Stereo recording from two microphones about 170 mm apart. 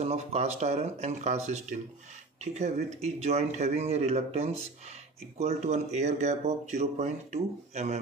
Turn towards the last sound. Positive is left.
turn(degrees=-40)  # may be behind; listen again after turning